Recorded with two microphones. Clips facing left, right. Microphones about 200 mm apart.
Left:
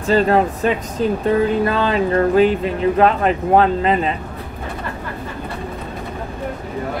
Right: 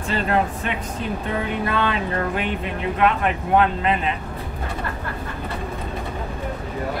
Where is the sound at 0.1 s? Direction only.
35° left (ahead or behind).